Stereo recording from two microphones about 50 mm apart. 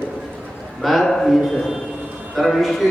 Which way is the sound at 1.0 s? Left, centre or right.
Centre.